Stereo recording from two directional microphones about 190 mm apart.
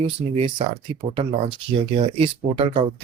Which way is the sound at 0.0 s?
30° right (ahead or behind).